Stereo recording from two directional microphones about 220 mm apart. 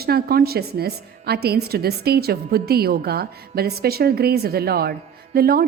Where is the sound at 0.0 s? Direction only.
45° right (ahead or behind).